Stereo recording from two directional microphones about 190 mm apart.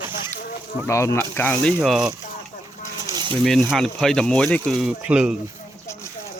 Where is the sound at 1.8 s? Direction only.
5° right (ahead or behind).